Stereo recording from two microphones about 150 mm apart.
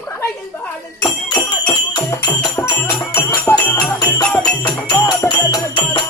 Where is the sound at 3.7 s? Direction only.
25° left (ahead or behind).